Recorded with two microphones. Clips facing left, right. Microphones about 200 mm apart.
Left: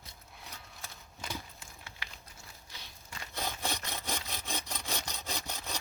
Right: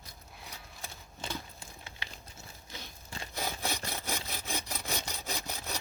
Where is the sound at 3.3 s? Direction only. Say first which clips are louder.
Right 1 dB; 10° right (ahead or behind).